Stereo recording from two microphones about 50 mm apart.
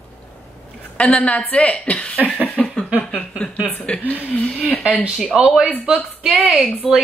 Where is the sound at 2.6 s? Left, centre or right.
Centre.